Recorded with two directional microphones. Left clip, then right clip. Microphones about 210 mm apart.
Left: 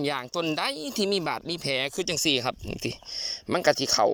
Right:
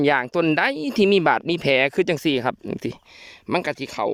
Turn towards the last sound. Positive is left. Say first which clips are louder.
# left 3 dB
turn(degrees=-20)  # may be behind; listen again after turning